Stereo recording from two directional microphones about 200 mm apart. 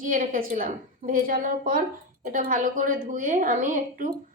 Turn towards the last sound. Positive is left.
turn(degrees=-40)  # may be behind; listen again after turning